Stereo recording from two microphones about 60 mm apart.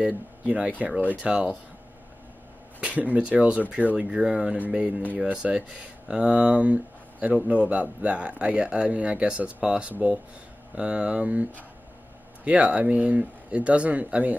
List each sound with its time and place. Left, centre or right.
0.0 s speech: centre
2.8 s speech: right